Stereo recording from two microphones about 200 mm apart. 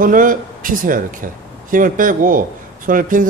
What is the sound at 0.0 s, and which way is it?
A man's voice, 40° right (ahead or behind).